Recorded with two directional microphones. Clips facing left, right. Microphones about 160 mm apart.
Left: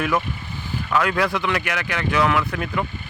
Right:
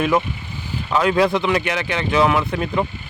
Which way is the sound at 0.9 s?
20° right (ahead or behind).